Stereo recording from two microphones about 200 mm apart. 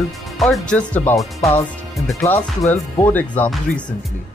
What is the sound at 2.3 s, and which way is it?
Speech, 10° left (ahead or behind).